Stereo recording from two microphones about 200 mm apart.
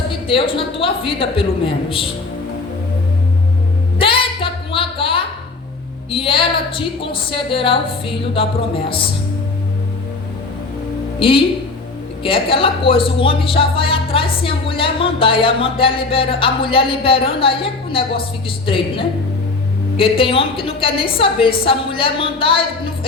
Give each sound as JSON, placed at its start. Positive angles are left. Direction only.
{"t": 0.1, "sound": "a woman's voice", "side_deg": 25}
{"t": 3.9, "sound": "music", "side_deg": 25}
{"t": 6.1, "sound": "a woman's voice", "side_deg": 25}
{"t": 11.2, "sound": "a woman's voice", "side_deg": 25}